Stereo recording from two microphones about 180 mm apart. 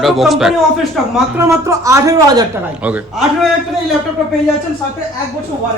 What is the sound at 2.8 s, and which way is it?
Speech, 10° right (ahead or behind).